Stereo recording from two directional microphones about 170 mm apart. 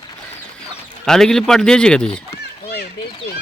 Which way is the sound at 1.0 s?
5° left (ahead or behind).